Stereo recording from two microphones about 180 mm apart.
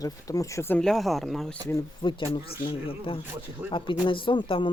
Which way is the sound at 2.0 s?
25° left (ahead or behind).